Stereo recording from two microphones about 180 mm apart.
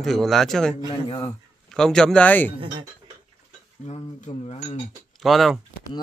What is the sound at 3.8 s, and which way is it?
Speech, 40° left (ahead or behind).